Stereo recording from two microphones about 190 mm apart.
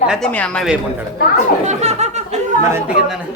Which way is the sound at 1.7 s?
35° right (ahead or behind).